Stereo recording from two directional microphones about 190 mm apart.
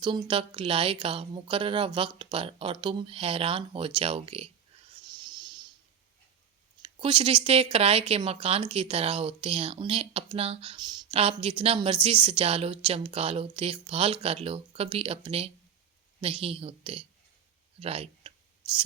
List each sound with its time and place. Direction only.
0.0 s speech: 25° right (ahead or behind)
5.0 s a sound: 25° right (ahead or behind)
6.8 s speech: 30° right (ahead or behind)